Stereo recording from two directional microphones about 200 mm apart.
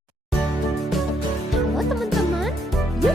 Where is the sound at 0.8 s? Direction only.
Centre (ahead or behind).